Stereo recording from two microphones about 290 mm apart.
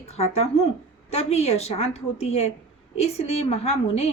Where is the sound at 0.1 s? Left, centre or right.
Left.